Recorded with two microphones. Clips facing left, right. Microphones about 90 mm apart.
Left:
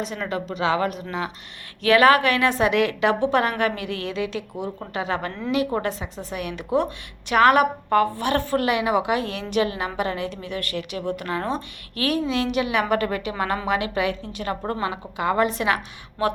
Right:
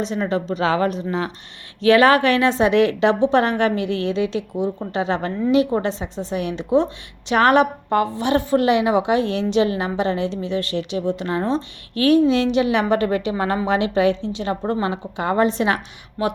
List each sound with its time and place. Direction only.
0.0 s a woman's voice: 30° right (ahead or behind)